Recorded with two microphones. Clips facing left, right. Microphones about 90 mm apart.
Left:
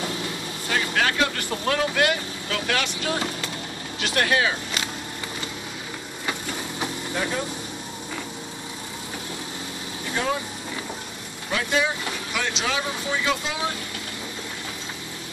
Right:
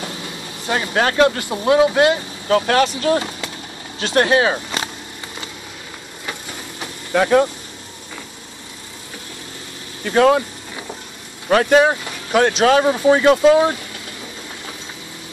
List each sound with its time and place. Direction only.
0.7 s speech: 30° right (ahead or behind)
1.4 s speech: 20° right (ahead or behind)
2.5 s speech: 40° right (ahead or behind)
4.0 s speech: 35° right (ahead or behind)
7.1 s speech: 80° right
10.0 s speech: 75° right (ahead or behind)
11.5 s speech: 55° right (ahead or behind)